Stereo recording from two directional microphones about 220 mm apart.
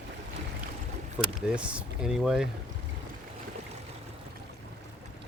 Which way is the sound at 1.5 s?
5° right (ahead or behind).